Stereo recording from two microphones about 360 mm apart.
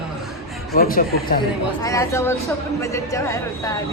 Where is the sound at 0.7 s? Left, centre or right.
Left.